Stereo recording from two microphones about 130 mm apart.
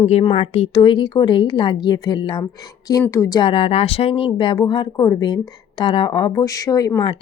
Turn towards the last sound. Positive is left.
turn(degrees=30)  # may be behind; listen again after turning